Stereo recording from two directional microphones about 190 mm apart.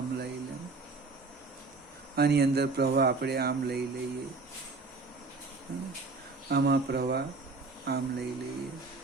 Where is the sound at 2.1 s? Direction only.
55° right (ahead or behind).